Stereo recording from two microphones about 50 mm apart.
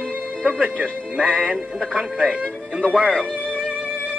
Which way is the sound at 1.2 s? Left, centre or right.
Right.